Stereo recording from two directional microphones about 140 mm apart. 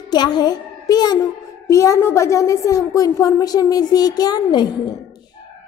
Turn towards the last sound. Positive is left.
turn(degrees=30)  # may be behind; listen again after turning